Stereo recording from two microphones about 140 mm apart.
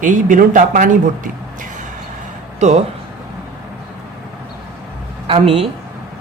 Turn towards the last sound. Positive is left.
turn(degrees=-45)  # may be behind; listen again after turning